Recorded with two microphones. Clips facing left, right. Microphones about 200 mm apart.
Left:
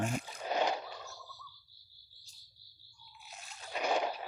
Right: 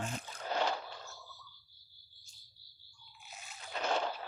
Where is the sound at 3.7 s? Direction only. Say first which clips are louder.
Left 2 dB; 15° left (ahead or behind).